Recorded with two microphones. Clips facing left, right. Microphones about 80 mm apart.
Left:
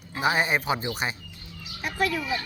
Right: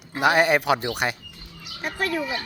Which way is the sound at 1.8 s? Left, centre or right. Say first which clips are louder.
Even; right.